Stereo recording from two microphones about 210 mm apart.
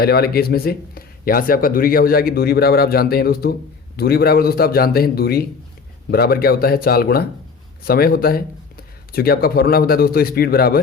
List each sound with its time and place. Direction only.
0.0 s speech: 45° left (ahead or behind)